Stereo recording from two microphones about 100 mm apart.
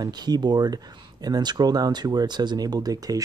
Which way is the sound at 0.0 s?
45° right (ahead or behind).